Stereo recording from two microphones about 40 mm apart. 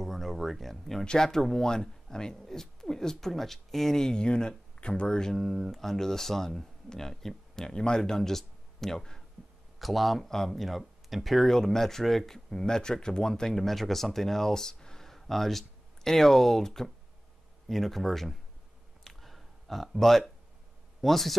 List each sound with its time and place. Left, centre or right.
0.0 s a sound: centre
1.0 s speech: centre
5.3 s speech: centre
8.0 s speech: centre
9.8 s speech: centre
13.5 s speech: centre
19.0 s a sound: centre
21.0 s speech: centre